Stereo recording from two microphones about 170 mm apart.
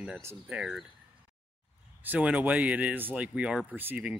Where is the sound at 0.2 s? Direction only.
15° right (ahead or behind).